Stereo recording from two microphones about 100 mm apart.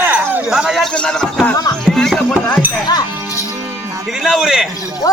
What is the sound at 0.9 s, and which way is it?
Speech, 10° left (ahead or behind).